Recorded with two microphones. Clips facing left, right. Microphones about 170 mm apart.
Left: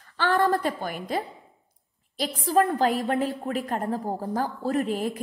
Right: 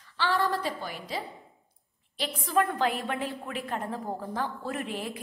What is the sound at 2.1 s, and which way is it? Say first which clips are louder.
A woman's voice: left 4 dB; 40° left (ahead or behind).